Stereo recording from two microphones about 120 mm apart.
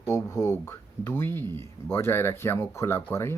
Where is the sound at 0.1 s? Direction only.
20° left (ahead or behind).